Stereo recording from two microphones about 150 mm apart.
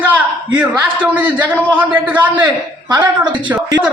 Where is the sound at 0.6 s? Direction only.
10° right (ahead or behind).